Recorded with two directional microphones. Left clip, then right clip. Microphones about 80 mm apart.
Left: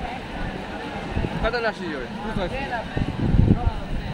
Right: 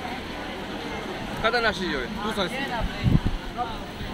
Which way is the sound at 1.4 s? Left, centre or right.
Left.